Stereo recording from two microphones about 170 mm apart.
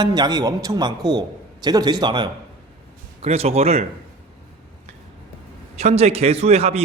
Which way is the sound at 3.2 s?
35° right (ahead or behind).